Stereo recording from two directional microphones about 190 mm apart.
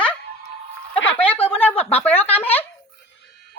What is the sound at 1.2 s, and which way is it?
Speech, 30° left (ahead or behind).